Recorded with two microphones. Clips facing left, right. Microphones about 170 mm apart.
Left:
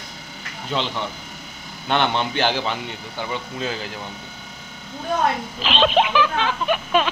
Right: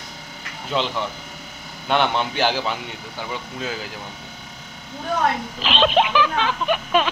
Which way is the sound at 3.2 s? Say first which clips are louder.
Left 2 dB; 5° right (ahead or behind).